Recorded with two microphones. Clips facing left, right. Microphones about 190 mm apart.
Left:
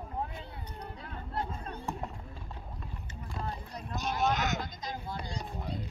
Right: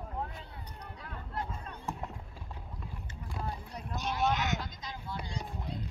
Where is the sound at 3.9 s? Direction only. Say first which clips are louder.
Left 1 dB; 45° left (ahead or behind).